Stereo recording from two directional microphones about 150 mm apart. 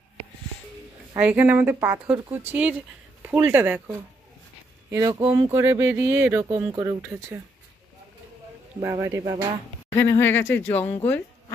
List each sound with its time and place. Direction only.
1.1 s speech: 10° right (ahead or behind)
4.9 s speech: 25° right (ahead or behind)
8.8 s speech: 15° right (ahead or behind)
9.8 s speech: 15° left (ahead or behind)